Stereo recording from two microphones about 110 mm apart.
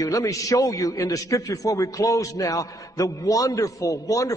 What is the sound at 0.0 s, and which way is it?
A man's voice, 30° left (ahead or behind).